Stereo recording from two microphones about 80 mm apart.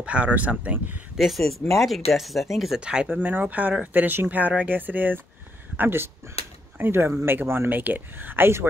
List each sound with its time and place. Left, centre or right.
0.0 s speech: centre
1.1 s speech: centre
3.1 s speech: right